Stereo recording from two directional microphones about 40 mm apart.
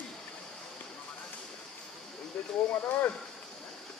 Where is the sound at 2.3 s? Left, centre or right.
Left.